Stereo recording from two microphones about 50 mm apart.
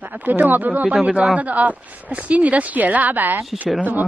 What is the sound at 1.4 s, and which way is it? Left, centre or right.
A woman's voice, right.